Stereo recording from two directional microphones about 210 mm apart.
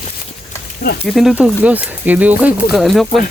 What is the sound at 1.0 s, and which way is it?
Speech, centre (ahead or behind).